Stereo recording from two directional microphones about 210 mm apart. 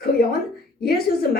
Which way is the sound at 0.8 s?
45° left (ahead or behind).